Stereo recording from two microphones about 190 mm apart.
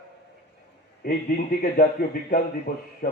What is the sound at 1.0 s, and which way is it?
A man's voice, 50° left (ahead or behind).